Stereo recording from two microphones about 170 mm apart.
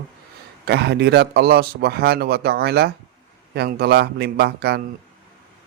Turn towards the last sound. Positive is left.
turn(degrees=-70)  # may be behind; listen again after turning